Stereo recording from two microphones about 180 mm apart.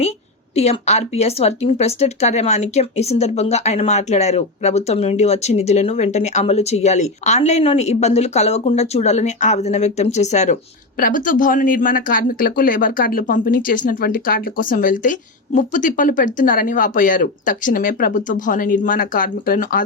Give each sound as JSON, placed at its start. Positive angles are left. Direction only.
{"t": 0.5, "sound": "speech", "side_deg": 35}
{"t": 10.9, "sound": "speech", "side_deg": 50}